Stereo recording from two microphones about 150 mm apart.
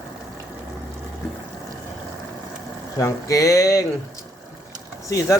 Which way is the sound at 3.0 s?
20° left (ahead or behind).